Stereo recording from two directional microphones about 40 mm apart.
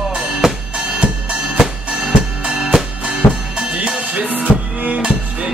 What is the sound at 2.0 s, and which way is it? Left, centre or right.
Music, right.